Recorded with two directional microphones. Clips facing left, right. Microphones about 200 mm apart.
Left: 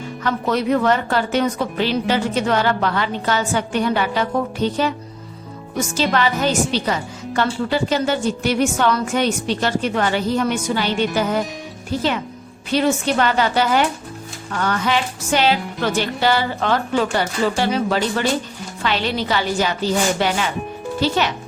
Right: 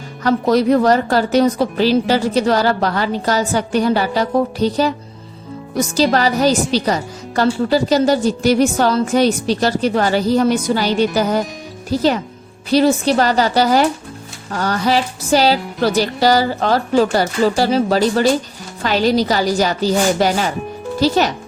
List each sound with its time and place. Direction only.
0.2 s a woman's voice: 35° right (ahead or behind)